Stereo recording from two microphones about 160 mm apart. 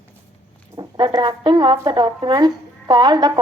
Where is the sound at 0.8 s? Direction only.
25° right (ahead or behind).